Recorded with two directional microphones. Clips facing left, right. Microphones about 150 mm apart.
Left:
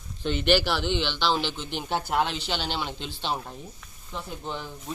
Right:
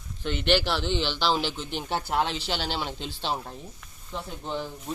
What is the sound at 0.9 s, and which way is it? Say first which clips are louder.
Speech: even; 5° right (ahead or behind).